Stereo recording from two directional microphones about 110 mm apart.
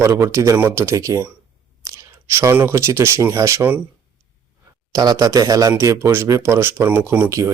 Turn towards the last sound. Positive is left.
turn(degrees=-30)  # may be behind; listen again after turning